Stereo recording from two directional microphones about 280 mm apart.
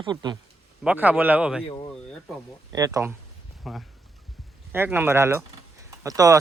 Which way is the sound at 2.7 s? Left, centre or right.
Centre.